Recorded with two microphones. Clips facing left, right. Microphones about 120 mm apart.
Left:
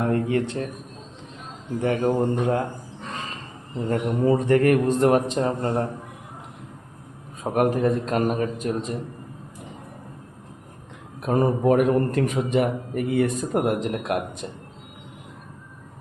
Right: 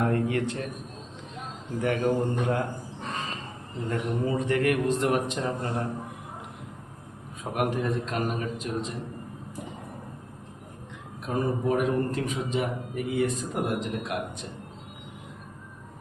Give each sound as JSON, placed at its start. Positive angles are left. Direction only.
{"t": 0.1, "sound": "a man's voice", "side_deg": 30}
{"t": 1.8, "sound": "speech", "side_deg": 30}
{"t": 3.8, "sound": "a man's voice", "side_deg": 40}
{"t": 7.4, "sound": "a man's voice", "side_deg": 40}
{"t": 11.3, "sound": "a man's voice", "side_deg": 60}